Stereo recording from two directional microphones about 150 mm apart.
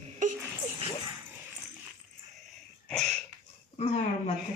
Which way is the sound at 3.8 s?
45° left (ahead or behind).